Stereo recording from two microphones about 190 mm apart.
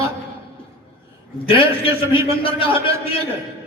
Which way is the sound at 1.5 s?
30° left (ahead or behind).